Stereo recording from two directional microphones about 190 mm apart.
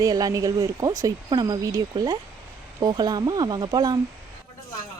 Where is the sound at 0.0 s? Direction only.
20° right (ahead or behind).